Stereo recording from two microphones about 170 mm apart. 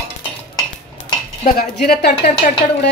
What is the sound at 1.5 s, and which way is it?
Speech, 60° left (ahead or behind).